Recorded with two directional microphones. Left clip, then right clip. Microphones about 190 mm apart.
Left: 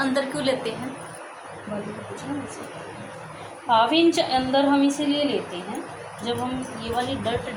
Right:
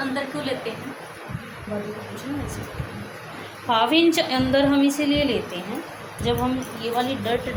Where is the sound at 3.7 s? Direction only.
35° right (ahead or behind).